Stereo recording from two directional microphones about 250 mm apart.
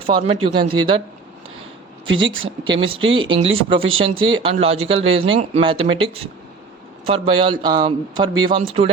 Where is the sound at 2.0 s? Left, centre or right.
Right.